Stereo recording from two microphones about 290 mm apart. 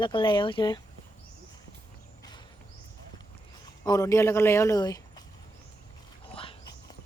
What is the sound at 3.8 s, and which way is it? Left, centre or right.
A man's voice, centre.